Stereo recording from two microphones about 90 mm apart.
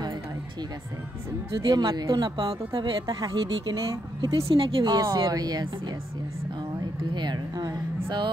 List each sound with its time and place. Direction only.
1.6 s speech: 50° right (ahead or behind)
3.2 s speech: 45° right (ahead or behind)
4.2 s a woman's voice: 75° right (ahead or behind)
4.9 s speech: 40° right (ahead or behind)
7.2 s a sound: 50° right (ahead or behind)